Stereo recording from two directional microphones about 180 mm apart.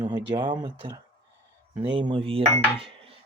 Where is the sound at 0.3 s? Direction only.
25° right (ahead or behind).